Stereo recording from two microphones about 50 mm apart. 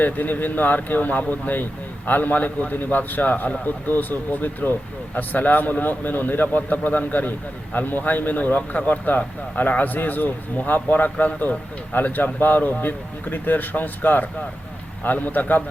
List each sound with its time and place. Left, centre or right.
0.0 s a man's voice: left